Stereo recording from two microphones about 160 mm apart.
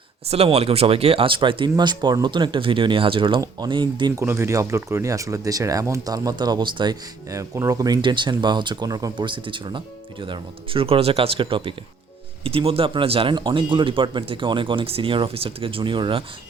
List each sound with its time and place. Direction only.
0.3 s speech: 40° right (ahead or behind)
4.1 s speech: 15° right (ahead or behind); by 16.2 s 30° right (ahead or behind)